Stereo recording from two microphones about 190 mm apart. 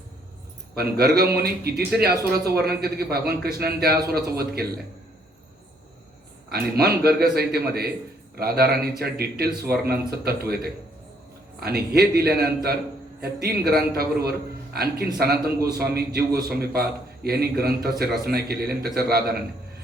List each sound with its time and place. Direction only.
0.8 s a man's voice: 55° right (ahead or behind)
6.5 s a man's voice: 55° right (ahead or behind)